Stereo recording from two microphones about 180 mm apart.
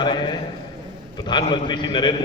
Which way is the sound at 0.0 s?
25° left (ahead or behind).